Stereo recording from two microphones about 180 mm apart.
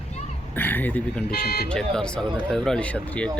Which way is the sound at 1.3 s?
60° left (ahead or behind).